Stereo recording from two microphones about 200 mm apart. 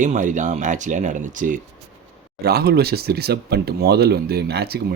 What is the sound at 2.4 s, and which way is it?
Speech, 55° right (ahead or behind).